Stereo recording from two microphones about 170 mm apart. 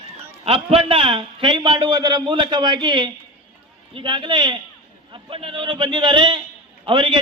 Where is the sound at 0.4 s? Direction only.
35° right (ahead or behind).